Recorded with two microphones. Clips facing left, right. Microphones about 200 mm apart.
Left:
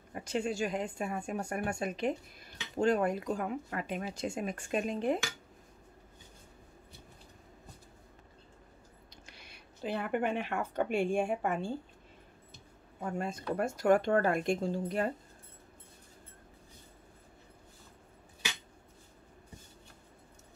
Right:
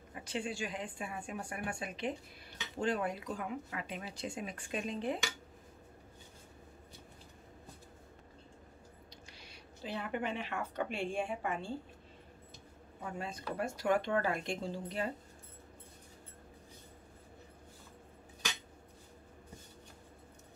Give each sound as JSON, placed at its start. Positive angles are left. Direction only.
{"t": 0.1, "sound": "speech", "side_deg": 45}
{"t": 9.2, "sound": "speech", "side_deg": 55}
{"t": 13.0, "sound": "speech", "side_deg": 50}